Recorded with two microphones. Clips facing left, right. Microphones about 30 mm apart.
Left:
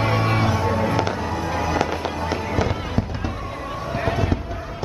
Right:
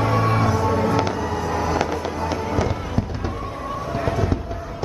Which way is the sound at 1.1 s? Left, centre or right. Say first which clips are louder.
Right 1 dB; left.